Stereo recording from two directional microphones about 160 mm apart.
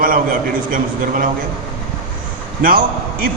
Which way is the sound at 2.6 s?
60° right (ahead or behind).